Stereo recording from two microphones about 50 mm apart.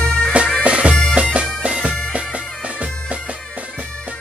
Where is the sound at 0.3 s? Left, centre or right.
Right.